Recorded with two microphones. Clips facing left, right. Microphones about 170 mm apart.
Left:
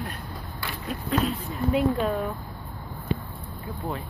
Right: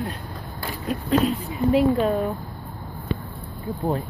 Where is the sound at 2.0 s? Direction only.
20° right (ahead or behind).